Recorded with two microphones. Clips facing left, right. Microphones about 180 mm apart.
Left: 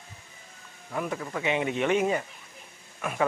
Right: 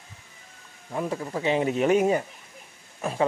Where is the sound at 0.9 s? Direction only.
25° right (ahead or behind).